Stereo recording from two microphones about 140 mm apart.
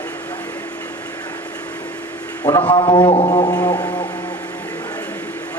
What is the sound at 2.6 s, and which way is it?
A man's voice, 35° left (ahead or behind).